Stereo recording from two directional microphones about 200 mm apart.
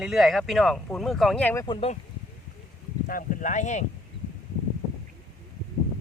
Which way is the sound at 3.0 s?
45° left (ahead or behind).